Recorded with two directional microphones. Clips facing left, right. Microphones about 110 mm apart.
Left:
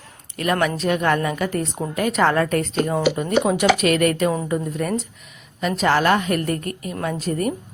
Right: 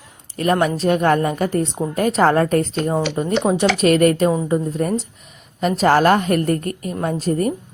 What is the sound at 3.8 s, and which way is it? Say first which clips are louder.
A woman's voice: right 4 dB; 40° right (ahead or behind).